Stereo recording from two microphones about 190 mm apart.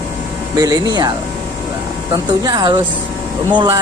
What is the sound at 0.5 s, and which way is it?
Speech, 20° right (ahead or behind).